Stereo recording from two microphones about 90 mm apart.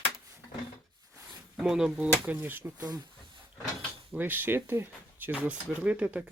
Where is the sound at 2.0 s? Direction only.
15° right (ahead or behind).